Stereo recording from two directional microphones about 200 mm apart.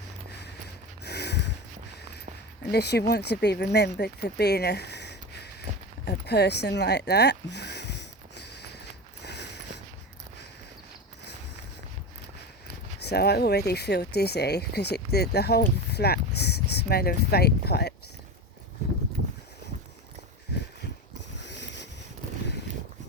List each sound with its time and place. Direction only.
0.3 s mechanisms: 55° left (ahead or behind)
1.0 s a sound: 55° left (ahead or behind)
2.7 s speech: 55° left (ahead or behind)
6.1 s a sound: 55° left (ahead or behind)
9.2 s mechanisms: 55° left (ahead or behind)
13.0 s speech: 55° left (ahead or behind)
21.3 s boat: 60° left (ahead or behind)